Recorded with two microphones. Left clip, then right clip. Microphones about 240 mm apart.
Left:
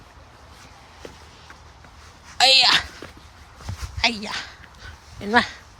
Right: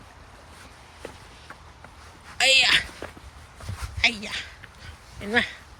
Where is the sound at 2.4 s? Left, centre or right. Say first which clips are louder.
Left 3 dB; centre.